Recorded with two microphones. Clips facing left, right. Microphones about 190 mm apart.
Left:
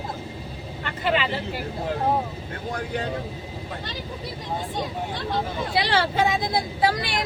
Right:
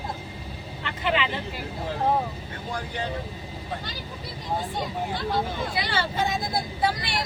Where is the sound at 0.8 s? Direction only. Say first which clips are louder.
Left 2 dB; 40° left (ahead or behind).